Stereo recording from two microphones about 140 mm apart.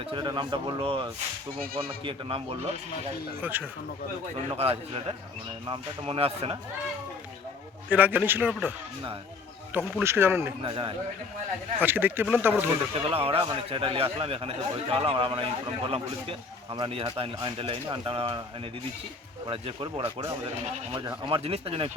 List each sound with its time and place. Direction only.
0.0 s a man's voice: 35° right (ahead or behind)
3.4 s a man's voice: 15° right (ahead or behind)
4.4 s a man's voice: 45° right (ahead or behind)
7.9 s a man's voice: 10° right (ahead or behind)
10.0 s a man's voice: 15° right (ahead or behind)
10.6 s a man's voice: 40° right (ahead or behind)
11.8 s a man's voice: 15° right (ahead or behind)
12.9 s a man's voice: 40° right (ahead or behind)